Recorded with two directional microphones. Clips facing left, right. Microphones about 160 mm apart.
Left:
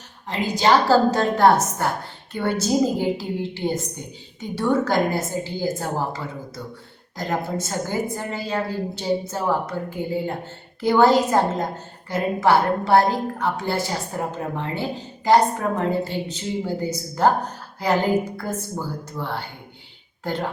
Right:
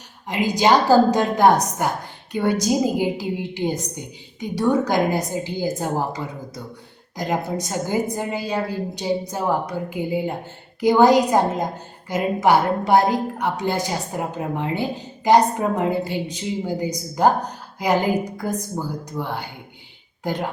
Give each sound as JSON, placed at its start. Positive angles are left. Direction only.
{"t": 0.3, "sound": "a woman's voice", "side_deg": -15}
{"t": 7.2, "sound": "a woman's voice", "side_deg": -15}